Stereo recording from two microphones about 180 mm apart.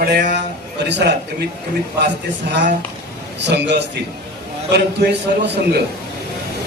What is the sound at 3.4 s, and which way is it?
A man's voice, 75° right (ahead or behind).